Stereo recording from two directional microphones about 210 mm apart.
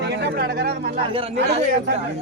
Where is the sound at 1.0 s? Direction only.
25° right (ahead or behind).